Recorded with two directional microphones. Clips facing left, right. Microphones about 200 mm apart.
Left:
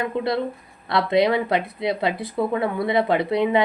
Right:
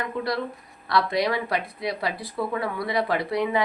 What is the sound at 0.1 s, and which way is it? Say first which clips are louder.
Speech: left 4 dB; 25° left (ahead or behind).